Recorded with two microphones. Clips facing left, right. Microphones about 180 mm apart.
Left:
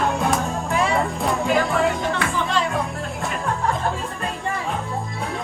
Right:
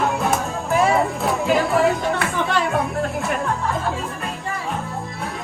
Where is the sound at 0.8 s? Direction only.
Centre (ahead or behind).